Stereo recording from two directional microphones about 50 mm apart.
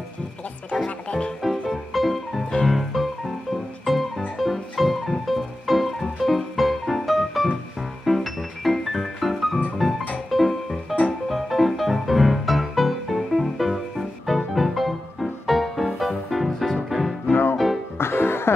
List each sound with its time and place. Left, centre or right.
0.7 s speech: centre
1.4 s music: centre
17.3 s music: left